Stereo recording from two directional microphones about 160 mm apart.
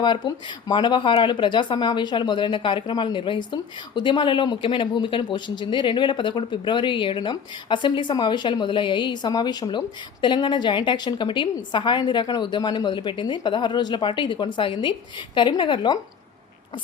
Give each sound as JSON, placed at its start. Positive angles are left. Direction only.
{"t": 0.0, "sound": "speech", "side_deg": 30}